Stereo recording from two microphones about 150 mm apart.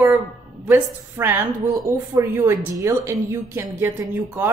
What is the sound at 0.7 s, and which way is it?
A woman's voice, 15° right (ahead or behind).